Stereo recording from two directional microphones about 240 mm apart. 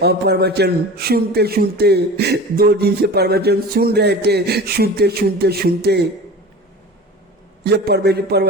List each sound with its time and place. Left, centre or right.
0.0 s a man's voice: right
7.6 s a man's voice: right